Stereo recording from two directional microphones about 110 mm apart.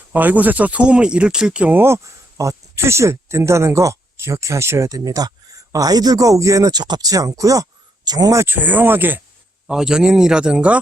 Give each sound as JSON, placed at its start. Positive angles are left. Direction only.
{"t": 0.1, "sound": "speech", "side_deg": -15}
{"t": 8.5, "sound": "speech", "side_deg": -15}
{"t": 9.6, "sound": "speech", "side_deg": -5}